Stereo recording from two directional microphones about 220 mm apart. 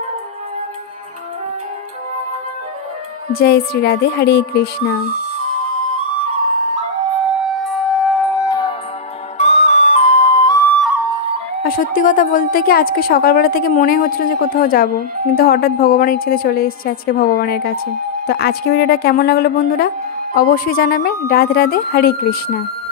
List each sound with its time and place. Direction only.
3.3 s a woman's voice: 45° left (ahead or behind)
7.2 s music: centre (ahead or behind); by 8.7 s 15° left (ahead or behind)
9.4 s music: 30° left (ahead or behind)
10.7 s music: centre (ahead or behind)
11.6 s a woman's voice: 40° left (ahead or behind)